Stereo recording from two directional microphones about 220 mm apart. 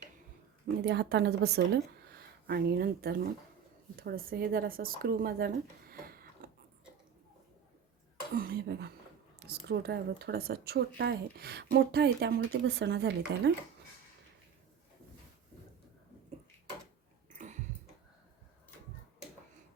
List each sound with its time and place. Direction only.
0.9 s speech: 50° right (ahead or behind)
8.4 s speech: 45° right (ahead or behind)
17.3 s a sound: 35° right (ahead or behind)